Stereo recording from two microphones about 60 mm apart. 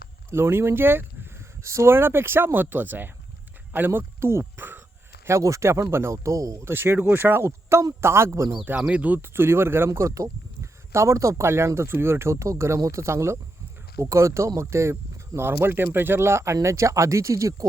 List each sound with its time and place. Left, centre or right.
0.3 s speech: right
1.6 s speech: right
4.5 s a sound: right
5.2 s speech: right
6.7 s speech: right
8.9 s speech: right
9.2 s speech: right
15.4 s speech: right